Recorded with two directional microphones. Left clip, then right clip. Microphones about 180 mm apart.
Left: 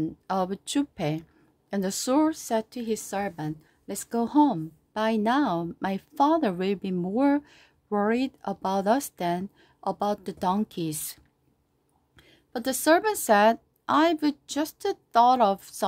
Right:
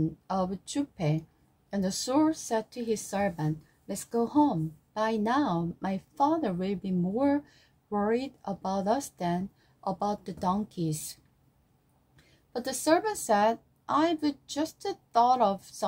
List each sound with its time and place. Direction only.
0.3 s a woman's voice: 45° left (ahead or behind)
12.2 s a woman's voice: 40° left (ahead or behind)